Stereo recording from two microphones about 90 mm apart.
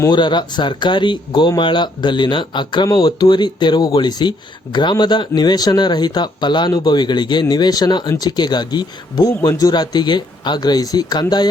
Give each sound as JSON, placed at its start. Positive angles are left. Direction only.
{"t": 0.1, "sound": "speech", "side_deg": 55}